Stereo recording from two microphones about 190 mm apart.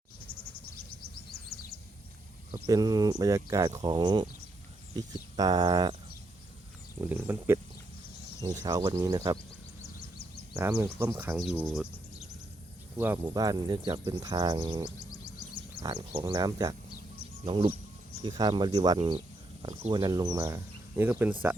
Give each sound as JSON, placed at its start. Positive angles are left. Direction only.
{"t": 2.5, "sound": "speech", "side_deg": -20}
{"t": 5.4, "sound": "speech", "side_deg": -20}
{"t": 7.0, "sound": "speech", "side_deg": -10}
{"t": 8.6, "sound": "speech", "side_deg": -20}
{"t": 10.6, "sound": "speech", "side_deg": -10}
{"t": 13.2, "sound": "speech", "side_deg": -20}
{"t": 14.9, "sound": "music", "side_deg": 20}
{"t": 15.8, "sound": "speech", "side_deg": -25}
{"t": 17.4, "sound": "speech", "side_deg": -30}